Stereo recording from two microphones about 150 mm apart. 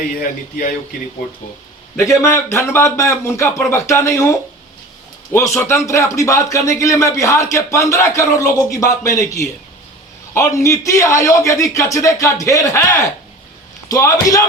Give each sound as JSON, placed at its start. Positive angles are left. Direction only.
{"t": 2.0, "sound": "speech", "side_deg": 15}